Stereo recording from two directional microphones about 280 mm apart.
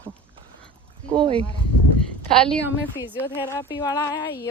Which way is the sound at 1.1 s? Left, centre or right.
Centre.